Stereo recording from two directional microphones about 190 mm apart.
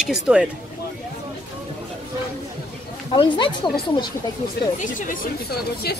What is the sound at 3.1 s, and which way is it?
Speech, 25° left (ahead or behind).